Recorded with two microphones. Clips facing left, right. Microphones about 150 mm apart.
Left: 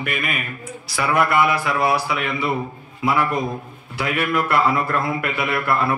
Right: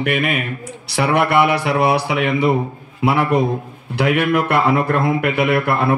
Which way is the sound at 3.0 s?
65° right (ahead or behind).